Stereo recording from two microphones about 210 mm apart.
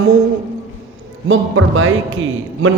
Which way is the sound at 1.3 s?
70° right (ahead or behind).